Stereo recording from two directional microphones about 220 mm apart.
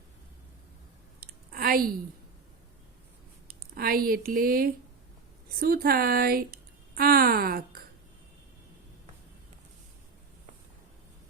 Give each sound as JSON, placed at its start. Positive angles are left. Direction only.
{"t": 1.2, "sound": "clicking", "side_deg": -40}
{"t": 3.4, "sound": "speech", "side_deg": -45}